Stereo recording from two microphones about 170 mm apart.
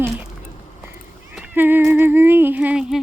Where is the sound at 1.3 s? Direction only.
10° right (ahead or behind).